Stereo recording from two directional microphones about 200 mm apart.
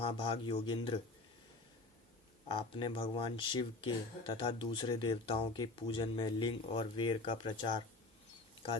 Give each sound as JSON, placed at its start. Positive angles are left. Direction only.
{"t": 0.0, "sound": "speech", "side_deg": 25}
{"t": 2.5, "sound": "speech", "side_deg": 25}